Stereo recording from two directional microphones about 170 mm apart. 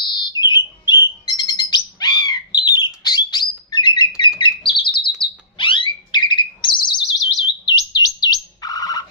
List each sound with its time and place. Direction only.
0.0 s bird: 25° left (ahead or behind)
7.6 s chirp: 25° left (ahead or behind)